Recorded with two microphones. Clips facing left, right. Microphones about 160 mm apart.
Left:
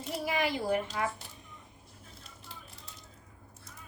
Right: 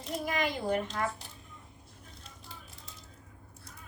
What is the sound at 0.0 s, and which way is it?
Speech, 5° left (ahead or behind).